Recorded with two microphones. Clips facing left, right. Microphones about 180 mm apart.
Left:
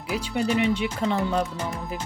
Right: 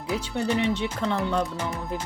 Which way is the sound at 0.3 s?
10° left (ahead or behind).